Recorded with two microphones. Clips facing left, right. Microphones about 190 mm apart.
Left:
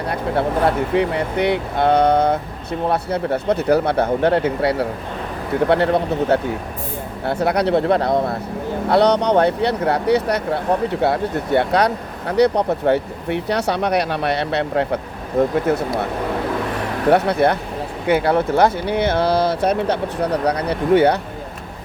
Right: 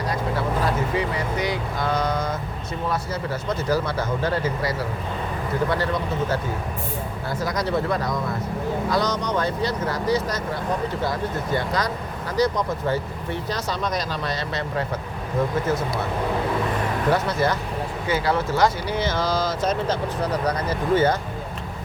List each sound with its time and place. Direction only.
0.1 s speech: 60° left (ahead or behind)
17.1 s speech: 60° left (ahead or behind)